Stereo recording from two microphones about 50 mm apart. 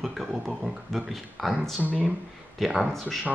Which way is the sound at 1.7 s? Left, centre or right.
Right.